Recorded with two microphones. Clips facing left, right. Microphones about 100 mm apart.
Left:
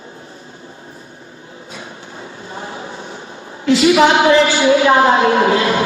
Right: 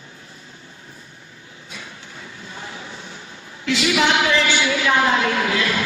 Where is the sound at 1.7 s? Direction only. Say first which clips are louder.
Left 5 dB; 35° left (ahead or behind).